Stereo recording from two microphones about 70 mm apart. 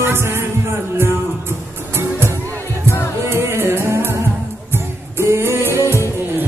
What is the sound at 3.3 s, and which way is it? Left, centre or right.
Music, right.